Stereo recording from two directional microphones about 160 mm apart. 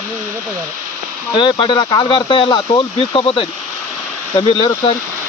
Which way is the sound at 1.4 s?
30° left (ahead or behind).